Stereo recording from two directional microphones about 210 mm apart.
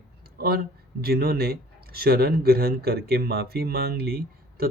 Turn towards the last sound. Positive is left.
turn(degrees=-45)  # may be behind; listen again after turning